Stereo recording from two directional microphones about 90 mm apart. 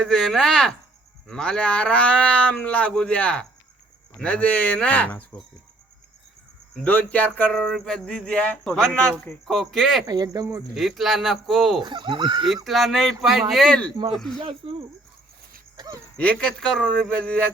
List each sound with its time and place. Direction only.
0.0 s speech: 5° left (ahead or behind)
6.8 s speech: 15° left (ahead or behind)
7.5 s speech: 5° left (ahead or behind)
10.1 s speech: 45° right (ahead or behind)
10.8 s speech: centre (ahead or behind)
11.8 s speech: 60° right (ahead or behind)
12.6 s speech: centre (ahead or behind)
14.6 s cricket: 75° right (ahead or behind)
16.1 s speech: 15° left (ahead or behind)